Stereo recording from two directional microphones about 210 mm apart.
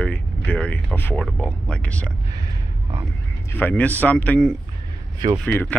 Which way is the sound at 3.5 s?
10° left (ahead or behind).